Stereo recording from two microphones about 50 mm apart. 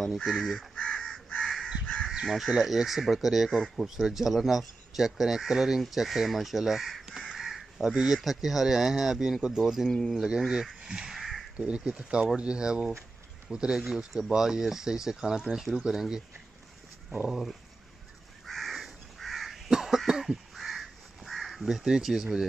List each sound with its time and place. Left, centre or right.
0.2 s speech: centre
0.7 s crow: left
1.4 s crow: centre
2.2 s speech: centre
7.9 s speech: centre
8.2 s speech: centre
9.8 s speech: centre
10.1 s speech: centre
10.8 s crow: centre
11.1 s a sound: centre
11.5 s speech: right
17.3 s speech: centre
18.4 s crow: centre
21.8 s speech: centre